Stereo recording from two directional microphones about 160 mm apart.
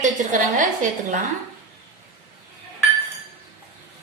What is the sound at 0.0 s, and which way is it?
A woman's voice, 50° right (ahead or behind).